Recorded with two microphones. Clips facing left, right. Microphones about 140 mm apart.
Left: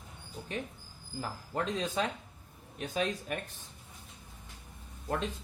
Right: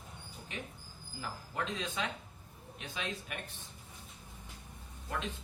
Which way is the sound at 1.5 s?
40° left (ahead or behind).